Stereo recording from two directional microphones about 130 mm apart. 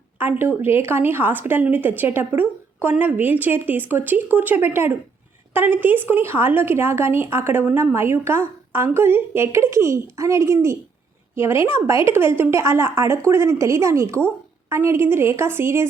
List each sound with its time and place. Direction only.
0.2 s a woman's voice: 15° right (ahead or behind)